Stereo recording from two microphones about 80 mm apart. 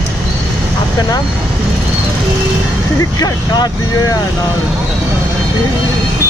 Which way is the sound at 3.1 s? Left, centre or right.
Left.